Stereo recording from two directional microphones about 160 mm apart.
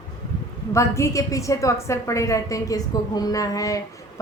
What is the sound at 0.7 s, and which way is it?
A woman's voice, 20° left (ahead or behind).